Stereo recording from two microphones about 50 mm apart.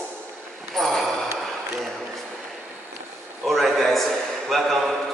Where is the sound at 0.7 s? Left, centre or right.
Centre.